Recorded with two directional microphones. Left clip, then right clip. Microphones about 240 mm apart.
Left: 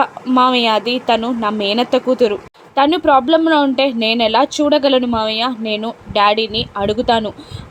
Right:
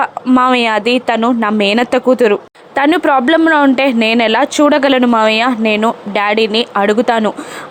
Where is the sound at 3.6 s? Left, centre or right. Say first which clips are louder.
Right 4 dB; right.